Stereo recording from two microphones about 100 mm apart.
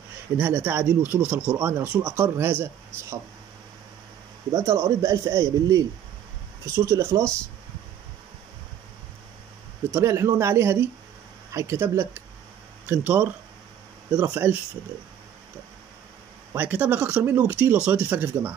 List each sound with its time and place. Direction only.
0.4 s a man's voice: 20° right (ahead or behind)
4.5 s a man's voice: 30° right (ahead or behind)
9.8 s a man's voice: 25° right (ahead or behind)
14.3 s a man's voice: 20° right (ahead or behind)
16.5 s a man's voice: 15° right (ahead or behind)